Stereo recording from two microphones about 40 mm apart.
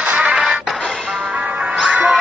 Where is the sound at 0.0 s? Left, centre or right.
Right.